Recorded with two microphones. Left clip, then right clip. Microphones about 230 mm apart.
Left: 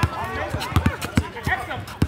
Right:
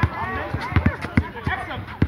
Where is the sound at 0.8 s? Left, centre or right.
Centre.